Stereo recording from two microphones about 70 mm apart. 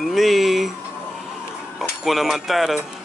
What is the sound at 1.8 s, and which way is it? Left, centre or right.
Speech, centre.